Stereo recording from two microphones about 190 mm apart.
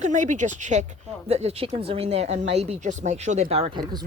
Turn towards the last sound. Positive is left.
turn(degrees=-30)  # may be behind; listen again after turning